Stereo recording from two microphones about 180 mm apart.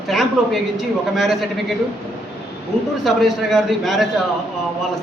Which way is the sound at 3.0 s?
Centre (ahead or behind).